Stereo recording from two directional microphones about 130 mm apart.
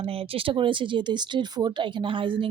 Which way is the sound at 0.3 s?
40° right (ahead or behind).